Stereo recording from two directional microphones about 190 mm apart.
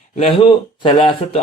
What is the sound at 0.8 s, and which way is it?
Speech, 25° left (ahead or behind).